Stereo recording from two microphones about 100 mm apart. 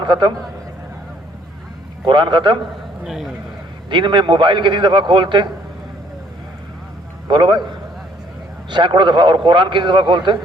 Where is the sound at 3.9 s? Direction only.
55° right (ahead or behind).